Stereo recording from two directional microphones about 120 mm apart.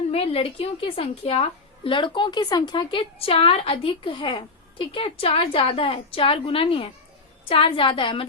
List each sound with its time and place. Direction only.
0.1 s a woman's voice: 55° left (ahead or behind)